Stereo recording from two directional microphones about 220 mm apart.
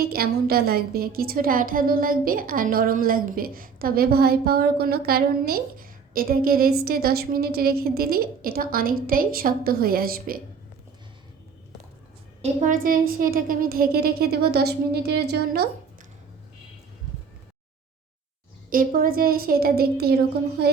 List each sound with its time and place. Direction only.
0.0 s a woman's voice: 45° right (ahead or behind)
12.4 s a woman's voice: 35° right (ahead or behind)
18.7 s a woman's voice: 40° right (ahead or behind)